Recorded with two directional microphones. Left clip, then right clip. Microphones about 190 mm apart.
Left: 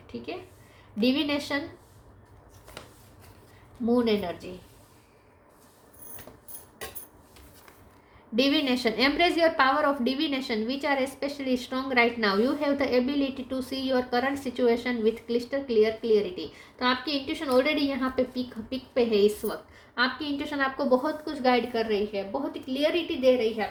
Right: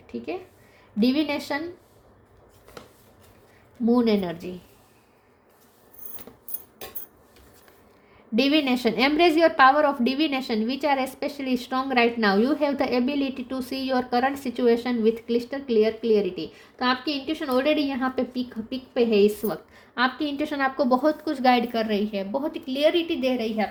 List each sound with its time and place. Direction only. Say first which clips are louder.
0.9 s a woman's voice: right 2 dB; 45° right (ahead or behind)
3.8 s a woman's voice: right 3 dB; 45° right (ahead or behind)
8.4 s a woman's voice: right 3 dB; 40° right (ahead or behind); by 23.6 s 60° right (ahead or behind)